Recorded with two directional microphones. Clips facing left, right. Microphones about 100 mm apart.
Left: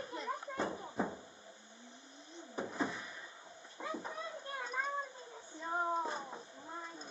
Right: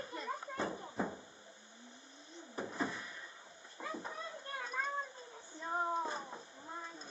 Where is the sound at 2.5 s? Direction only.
5° left (ahead or behind).